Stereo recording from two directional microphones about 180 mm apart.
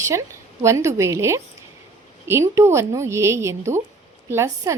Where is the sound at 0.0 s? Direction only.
15° right (ahead or behind).